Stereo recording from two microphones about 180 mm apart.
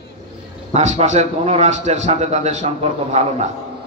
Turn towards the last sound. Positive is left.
turn(degrees=-35)  # may be behind; listen again after turning